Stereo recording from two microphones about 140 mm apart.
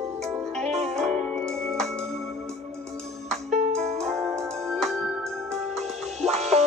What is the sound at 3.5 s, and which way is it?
Music, 55° right (ahead or behind).